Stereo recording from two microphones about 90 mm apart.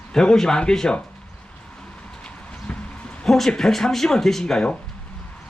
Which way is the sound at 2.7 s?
15° left (ahead or behind).